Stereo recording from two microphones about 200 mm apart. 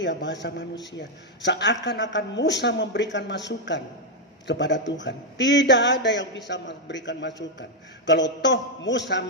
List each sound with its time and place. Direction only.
0.0 s a man's voice: 60° left (ahead or behind)